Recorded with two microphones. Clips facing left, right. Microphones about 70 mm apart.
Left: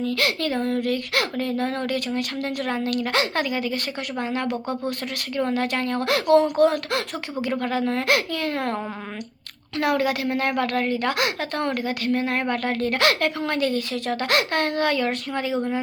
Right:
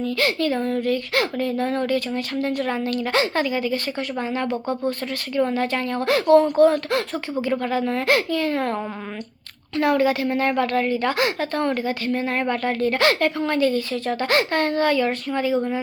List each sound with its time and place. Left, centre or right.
0.3 s a woman's voice: left
4.2 s speech: left
5.4 s a woman's voice: left
9.7 s speech: left
11.8 s speech: right
12.1 s a woman's voice: left